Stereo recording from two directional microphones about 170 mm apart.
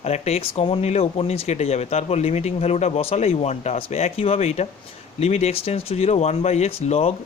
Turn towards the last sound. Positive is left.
turn(degrees=35)  # may be behind; listen again after turning